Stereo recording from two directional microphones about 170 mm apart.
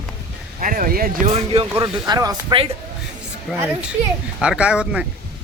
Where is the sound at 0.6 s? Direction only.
55° right (ahead or behind).